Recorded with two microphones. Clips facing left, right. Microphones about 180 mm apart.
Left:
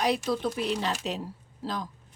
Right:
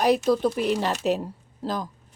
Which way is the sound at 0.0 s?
45° right (ahead or behind).